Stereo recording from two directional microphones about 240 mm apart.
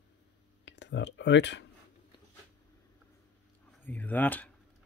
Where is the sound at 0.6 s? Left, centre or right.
Left.